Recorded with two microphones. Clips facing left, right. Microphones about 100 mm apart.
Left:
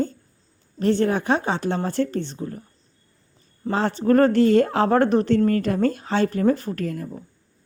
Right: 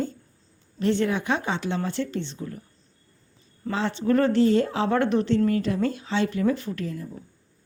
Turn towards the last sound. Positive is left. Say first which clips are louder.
# left 4 dB
turn(degrees=55)  # may be behind; listen again after turning